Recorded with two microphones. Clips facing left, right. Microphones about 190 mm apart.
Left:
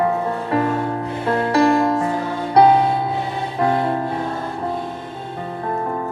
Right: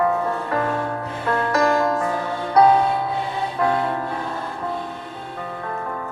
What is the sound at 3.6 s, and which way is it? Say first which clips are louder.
Music: left 3 dB; 30° left (ahead or behind).